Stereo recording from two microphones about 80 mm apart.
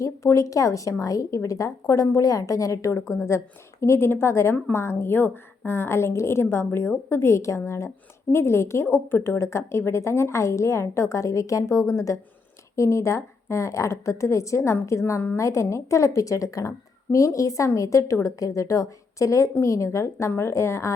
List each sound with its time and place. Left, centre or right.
0.0 s a woman's voice: left